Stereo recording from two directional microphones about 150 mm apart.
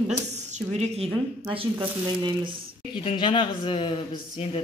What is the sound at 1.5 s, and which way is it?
Speech, 30° right (ahead or behind).